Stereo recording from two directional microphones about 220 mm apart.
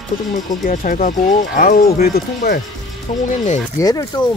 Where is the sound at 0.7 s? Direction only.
40° left (ahead or behind).